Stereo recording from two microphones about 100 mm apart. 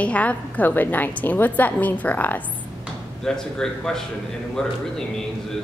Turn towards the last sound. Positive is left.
turn(degrees=5)  # may be behind; listen again after turning